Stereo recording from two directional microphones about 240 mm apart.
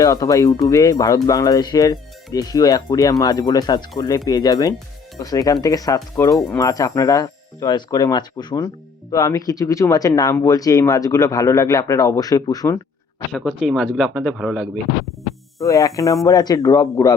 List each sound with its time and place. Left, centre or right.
0.0 s speech: centre
13.3 s speech: centre
15.6 s speech: centre